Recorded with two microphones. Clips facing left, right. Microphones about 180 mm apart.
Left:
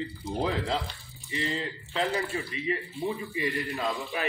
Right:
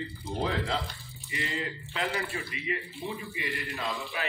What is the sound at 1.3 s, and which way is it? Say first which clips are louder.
Speech: left 3 dB; 35° left (ahead or behind).